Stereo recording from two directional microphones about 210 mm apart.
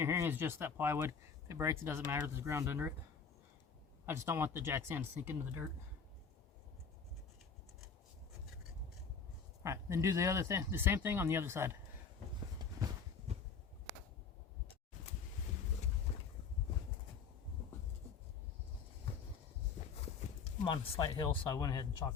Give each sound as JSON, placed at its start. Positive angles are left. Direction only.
{"t": 0.0, "sound": "speech", "side_deg": -10}
{"t": 4.0, "sound": "speech", "side_deg": -10}
{"t": 9.6, "sound": "speech", "side_deg": -15}
{"t": 16.1, "sound": "boat", "side_deg": 35}
{"t": 20.7, "sound": "speech", "side_deg": 20}